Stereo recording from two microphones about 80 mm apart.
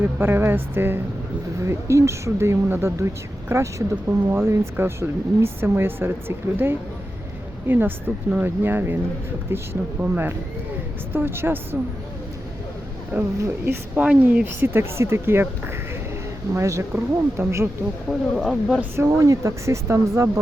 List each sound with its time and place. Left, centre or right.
0.0 s speech: right
13.1 s speech: right
14.0 s a woman's voice: centre
14.4 s speech: right
18.1 s speech: centre
18.9 s speech: right